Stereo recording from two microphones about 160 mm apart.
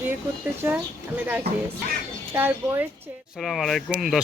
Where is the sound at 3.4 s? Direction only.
Centre (ahead or behind).